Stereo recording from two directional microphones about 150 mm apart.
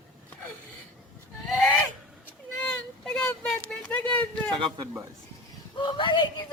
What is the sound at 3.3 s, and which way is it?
Vehicle, 15° left (ahead or behind).